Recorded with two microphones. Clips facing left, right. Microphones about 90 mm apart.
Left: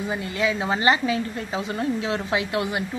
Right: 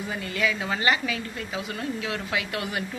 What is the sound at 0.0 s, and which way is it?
A woman's voice, 20° left (ahead or behind).